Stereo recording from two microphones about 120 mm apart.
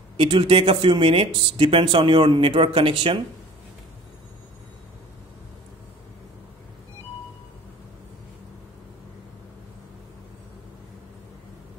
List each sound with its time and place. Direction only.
0.2 s speech: 50° right (ahead or behind)